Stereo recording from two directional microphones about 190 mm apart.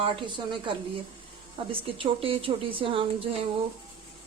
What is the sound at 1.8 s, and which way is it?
A woman's voice, 30° right (ahead or behind).